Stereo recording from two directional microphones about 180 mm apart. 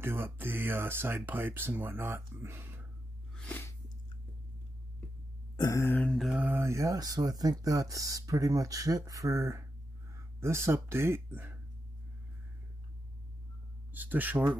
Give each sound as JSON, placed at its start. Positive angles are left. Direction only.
{"t": 0.0, "sound": "speech", "side_deg": -10}
{"t": 3.3, "sound": "a sound", "side_deg": 10}
{"t": 5.6, "sound": "speech", "side_deg": 15}
{"t": 13.9, "sound": "speech", "side_deg": -10}